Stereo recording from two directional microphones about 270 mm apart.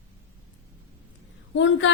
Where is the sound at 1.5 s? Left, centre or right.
Left.